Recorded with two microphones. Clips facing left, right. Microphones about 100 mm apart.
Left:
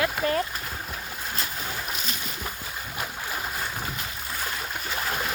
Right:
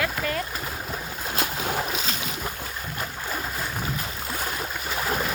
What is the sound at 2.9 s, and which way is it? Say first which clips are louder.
Boat: right 1 dB; 5° left (ahead or behind).